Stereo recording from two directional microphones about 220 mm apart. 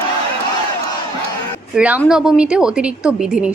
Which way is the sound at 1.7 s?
5° right (ahead or behind).